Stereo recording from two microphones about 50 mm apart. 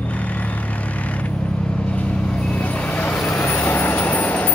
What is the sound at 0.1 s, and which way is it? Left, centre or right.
Vehicle, left.